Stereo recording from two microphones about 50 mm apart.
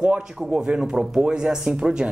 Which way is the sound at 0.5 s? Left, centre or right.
Centre.